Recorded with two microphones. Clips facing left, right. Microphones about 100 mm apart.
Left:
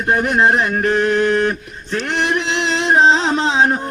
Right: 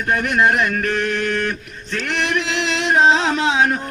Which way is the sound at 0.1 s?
30° left (ahead or behind).